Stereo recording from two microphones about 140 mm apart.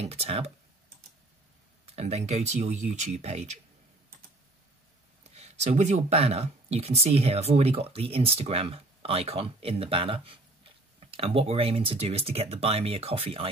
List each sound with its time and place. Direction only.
0.0 s speech: 45° right (ahead or behind)
1.9 s speech: 50° right (ahead or behind)
5.3 s speech: 50° right (ahead or behind)